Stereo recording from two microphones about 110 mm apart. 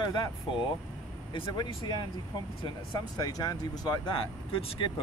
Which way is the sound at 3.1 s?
35° left (ahead or behind).